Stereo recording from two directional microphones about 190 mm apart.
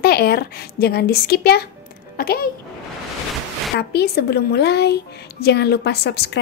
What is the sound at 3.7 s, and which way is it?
A woman's voice, 55° left (ahead or behind).